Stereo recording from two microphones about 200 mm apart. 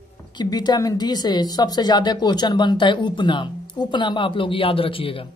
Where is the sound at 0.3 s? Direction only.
20° left (ahead or behind).